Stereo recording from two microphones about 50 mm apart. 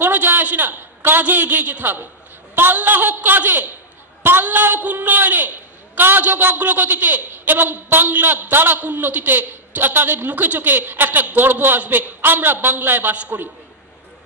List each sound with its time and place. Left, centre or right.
0.0 s a woman's voice: right